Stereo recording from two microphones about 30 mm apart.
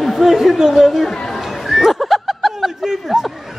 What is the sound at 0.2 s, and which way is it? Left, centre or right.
Speech, centre.